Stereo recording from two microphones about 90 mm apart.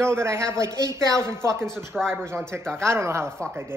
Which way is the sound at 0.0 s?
30° right (ahead or behind).